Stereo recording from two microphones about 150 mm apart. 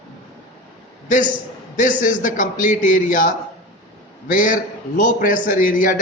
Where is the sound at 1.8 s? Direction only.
55° left (ahead or behind).